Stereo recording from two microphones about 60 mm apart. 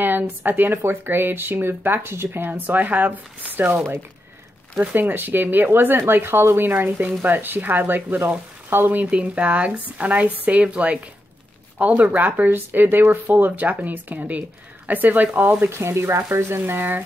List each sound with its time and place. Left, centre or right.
0.0 s speech: right
8.6 s frying: right
9.0 s speech: right
15.6 s speech: right